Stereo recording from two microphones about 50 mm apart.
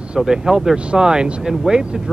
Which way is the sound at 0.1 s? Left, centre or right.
Centre.